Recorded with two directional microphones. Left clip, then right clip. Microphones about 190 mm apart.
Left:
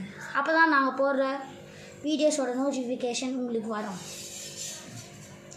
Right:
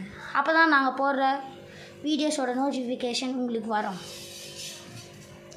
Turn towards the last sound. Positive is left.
turn(degrees=-20)  # may be behind; listen again after turning